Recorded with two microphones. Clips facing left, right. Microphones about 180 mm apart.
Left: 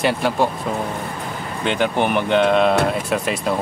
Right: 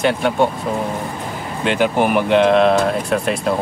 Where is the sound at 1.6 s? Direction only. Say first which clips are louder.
Right 3 dB; 5° right (ahead or behind).